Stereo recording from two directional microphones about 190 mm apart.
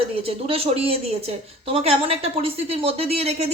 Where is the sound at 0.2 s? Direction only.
30° right (ahead or behind).